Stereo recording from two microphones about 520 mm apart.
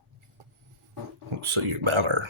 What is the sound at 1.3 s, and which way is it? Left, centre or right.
Speech, right.